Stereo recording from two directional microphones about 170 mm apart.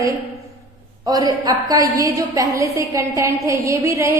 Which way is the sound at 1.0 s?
20° right (ahead or behind).